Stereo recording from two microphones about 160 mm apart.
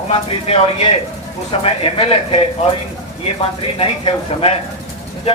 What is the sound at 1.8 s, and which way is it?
Speech, 35° left (ahead or behind).